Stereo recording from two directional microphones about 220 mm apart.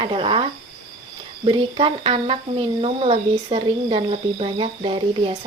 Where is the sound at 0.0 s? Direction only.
20° right (ahead or behind).